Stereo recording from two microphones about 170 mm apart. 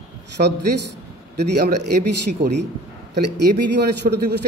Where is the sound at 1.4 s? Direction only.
70° right (ahead or behind).